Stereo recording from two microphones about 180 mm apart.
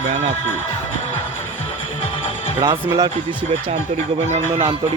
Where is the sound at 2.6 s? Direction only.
20° right (ahead or behind).